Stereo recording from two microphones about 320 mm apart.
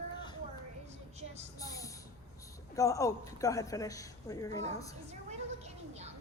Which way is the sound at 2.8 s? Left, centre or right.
Centre.